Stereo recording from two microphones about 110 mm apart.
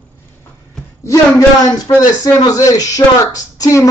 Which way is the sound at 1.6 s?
30° left (ahead or behind).